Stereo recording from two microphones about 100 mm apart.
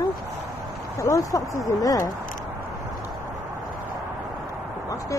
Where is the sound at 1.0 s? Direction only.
35° left (ahead or behind).